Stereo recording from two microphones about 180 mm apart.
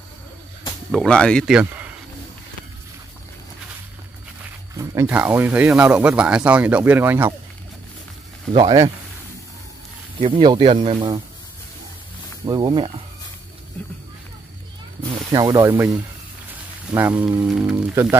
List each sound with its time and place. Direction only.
0.9 s speech: 5° left (ahead or behind)
1.6 s a sound: 5° right (ahead or behind)
5.0 s speech: 10° right (ahead or behind)
8.5 s speech: 25° right (ahead or behind)
10.2 s speech: 25° right (ahead or behind)
12.4 s speech: 25° right (ahead or behind)
13.8 s speech: 10° left (ahead or behind)
15.3 s speech: 20° right (ahead or behind); by 17.9 s 5° right (ahead or behind)